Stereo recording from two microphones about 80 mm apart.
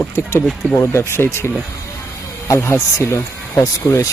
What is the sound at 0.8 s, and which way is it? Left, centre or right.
Speech, left.